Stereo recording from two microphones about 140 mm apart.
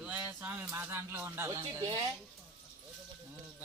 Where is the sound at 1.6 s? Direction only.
30° right (ahead or behind).